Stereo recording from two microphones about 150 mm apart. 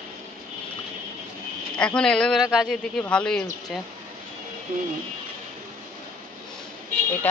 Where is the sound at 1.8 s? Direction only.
5° left (ahead or behind).